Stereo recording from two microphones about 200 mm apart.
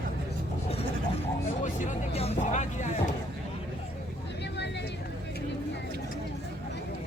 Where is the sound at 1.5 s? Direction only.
40° left (ahead or behind).